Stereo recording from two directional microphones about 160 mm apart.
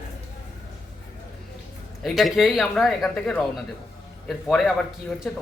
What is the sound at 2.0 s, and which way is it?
Speech, centre (ahead or behind).